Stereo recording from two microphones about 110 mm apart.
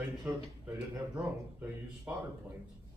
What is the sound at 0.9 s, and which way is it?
Speech, 15° right (ahead or behind).